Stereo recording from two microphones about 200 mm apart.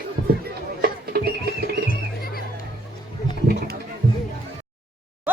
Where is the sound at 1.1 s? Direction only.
50° right (ahead or behind).